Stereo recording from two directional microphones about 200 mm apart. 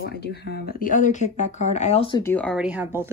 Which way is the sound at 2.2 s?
5° left (ahead or behind).